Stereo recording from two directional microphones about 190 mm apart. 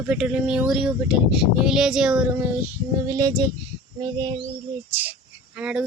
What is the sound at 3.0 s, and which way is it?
Speech, 20° right (ahead or behind).